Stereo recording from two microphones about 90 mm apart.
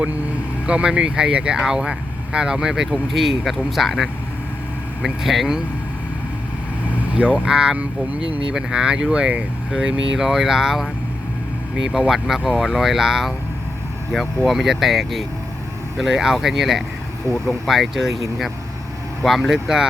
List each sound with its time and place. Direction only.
0.7 s speech: 10° right (ahead or behind)
7.2 s speech: 15° right (ahead or behind)
8.3 s speech: 90° right
8.5 s speech: 10° right (ahead or behind)
19.2 s speech: centre (ahead or behind)